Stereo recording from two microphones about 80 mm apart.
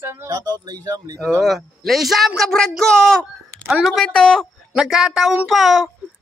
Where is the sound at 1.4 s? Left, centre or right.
Centre.